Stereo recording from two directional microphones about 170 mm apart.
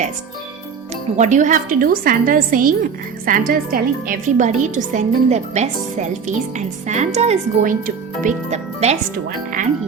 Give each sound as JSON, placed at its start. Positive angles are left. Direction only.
{"t": 1.1, "sound": "speech", "side_deg": -45}